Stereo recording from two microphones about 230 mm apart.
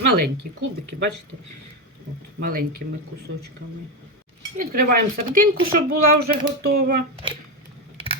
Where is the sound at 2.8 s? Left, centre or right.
Right.